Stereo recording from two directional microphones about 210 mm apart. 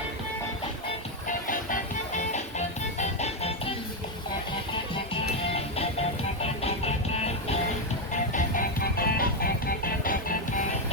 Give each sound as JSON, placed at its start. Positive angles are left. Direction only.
{"t": 1.5, "sound": "music", "side_deg": 35}
{"t": 5.2, "sound": "music", "side_deg": 30}
{"t": 8.1, "sound": "music", "side_deg": 35}